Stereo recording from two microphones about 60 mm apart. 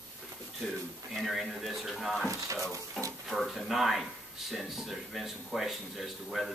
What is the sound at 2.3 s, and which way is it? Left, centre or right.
Speech, right.